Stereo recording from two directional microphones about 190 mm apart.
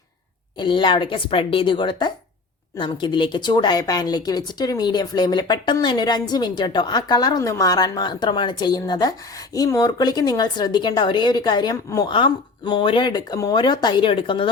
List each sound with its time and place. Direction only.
0.6 s a woman's voice: 25° left (ahead or behind)